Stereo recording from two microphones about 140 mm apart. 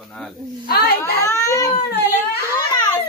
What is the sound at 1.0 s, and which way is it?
Speech, 20° left (ahead or behind).